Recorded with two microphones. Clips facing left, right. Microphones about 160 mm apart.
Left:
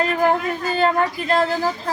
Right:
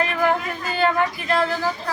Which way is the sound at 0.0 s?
35° left (ahead or behind).